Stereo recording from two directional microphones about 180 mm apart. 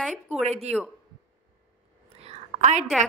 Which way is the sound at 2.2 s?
40° right (ahead or behind).